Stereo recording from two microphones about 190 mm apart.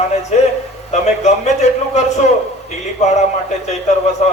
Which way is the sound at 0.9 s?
35° left (ahead or behind).